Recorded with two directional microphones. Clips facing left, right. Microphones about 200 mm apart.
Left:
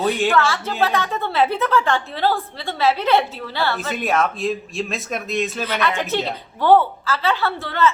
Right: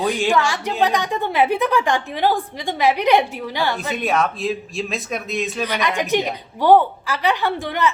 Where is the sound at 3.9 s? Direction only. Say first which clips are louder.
Even; centre (ahead or behind).